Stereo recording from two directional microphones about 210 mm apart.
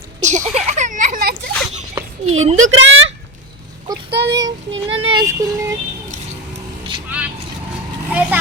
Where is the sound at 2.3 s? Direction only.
30° right (ahead or behind).